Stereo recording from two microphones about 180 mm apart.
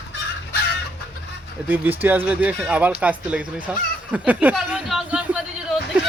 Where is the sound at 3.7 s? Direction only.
5° right (ahead or behind).